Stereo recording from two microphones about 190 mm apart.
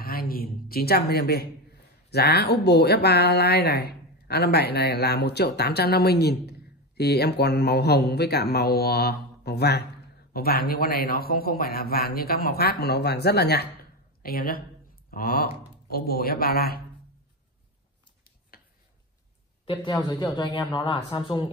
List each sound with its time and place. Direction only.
0.0 s a man's voice: 50° left (ahead or behind)
19.6 s speech: 25° left (ahead or behind)